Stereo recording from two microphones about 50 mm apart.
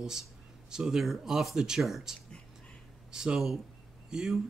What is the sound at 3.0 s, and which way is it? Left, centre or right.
Speech, centre.